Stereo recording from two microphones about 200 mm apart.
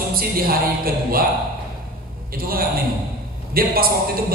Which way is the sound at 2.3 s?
50° right (ahead or behind).